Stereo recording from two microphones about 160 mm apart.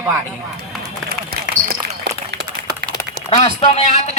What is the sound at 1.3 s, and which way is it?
Run, 80° right.